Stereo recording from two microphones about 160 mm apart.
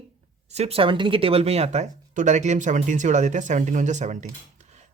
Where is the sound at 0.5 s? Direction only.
40° right (ahead or behind).